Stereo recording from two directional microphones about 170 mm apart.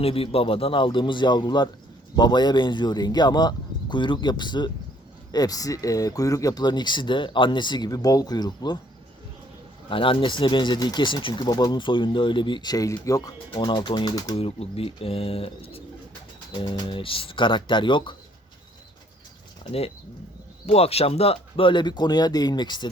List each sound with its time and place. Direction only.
0.0 s speech: 35° left (ahead or behind)
9.9 s speech: 30° left (ahead or behind)
14.3 s speech: 35° left (ahead or behind)
20.7 s speech: 35° left (ahead or behind)